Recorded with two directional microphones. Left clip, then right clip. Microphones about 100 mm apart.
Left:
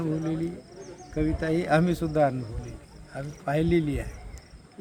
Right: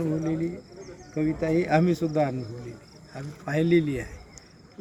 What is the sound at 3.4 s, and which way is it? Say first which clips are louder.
Speech: right 2 dB; 15° left (ahead or behind).